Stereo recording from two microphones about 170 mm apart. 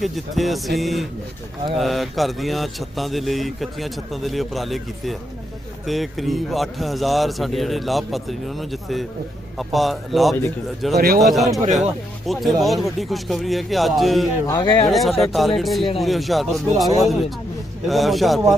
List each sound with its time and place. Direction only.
0.0 s speech: centre (ahead or behind)
10.9 s a man's voice: 60° right (ahead or behind)
11.2 s speech: centre (ahead or behind)
14.4 s speech: 25° left (ahead or behind)
14.8 s speech: centre (ahead or behind)